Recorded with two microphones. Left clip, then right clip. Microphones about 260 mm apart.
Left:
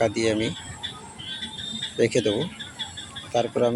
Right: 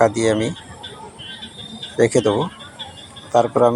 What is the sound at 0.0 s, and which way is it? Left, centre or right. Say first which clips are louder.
Speech: right 7 dB; centre.